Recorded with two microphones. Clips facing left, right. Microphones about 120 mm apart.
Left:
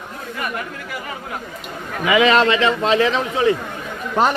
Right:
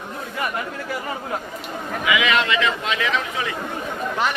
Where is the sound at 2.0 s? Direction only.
35° left (ahead or behind).